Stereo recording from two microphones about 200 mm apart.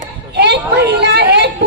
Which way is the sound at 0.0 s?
55° right (ahead or behind).